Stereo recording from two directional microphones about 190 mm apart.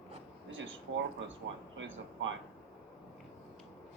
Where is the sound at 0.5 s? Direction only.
90° right.